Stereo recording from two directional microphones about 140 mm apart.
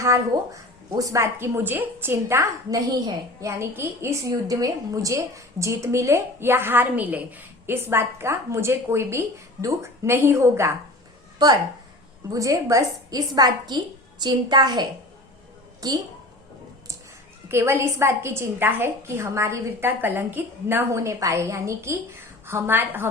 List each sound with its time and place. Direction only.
0.0 s a woman's voice: 20° right (ahead or behind)
17.5 s a woman's voice: 20° right (ahead or behind)